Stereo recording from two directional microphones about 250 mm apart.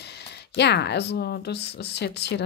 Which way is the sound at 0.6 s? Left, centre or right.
Left.